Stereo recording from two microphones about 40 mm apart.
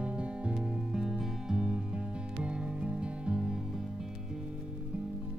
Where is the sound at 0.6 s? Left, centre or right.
Centre.